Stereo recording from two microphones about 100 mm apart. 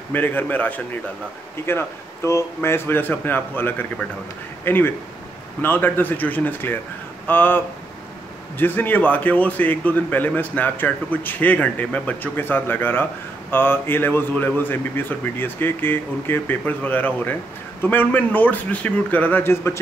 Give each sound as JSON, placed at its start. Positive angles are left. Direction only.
{"t": 0.1, "sound": "a man's voice", "side_deg": 20}